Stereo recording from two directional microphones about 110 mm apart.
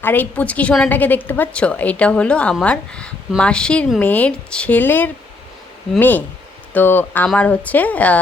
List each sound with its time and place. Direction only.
0.0 s a woman's voice: 15° left (ahead or behind)